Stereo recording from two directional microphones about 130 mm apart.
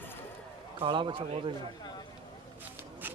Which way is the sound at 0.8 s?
40° right (ahead or behind).